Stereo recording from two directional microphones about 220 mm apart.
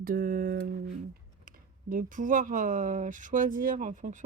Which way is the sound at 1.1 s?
40° right (ahead or behind).